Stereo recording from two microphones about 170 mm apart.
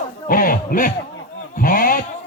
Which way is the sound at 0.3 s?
55° left (ahead or behind).